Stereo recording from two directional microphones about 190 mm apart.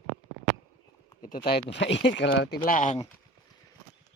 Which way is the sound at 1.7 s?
70° left (ahead or behind).